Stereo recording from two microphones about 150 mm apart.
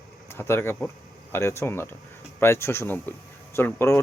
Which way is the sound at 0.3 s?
15° left (ahead or behind).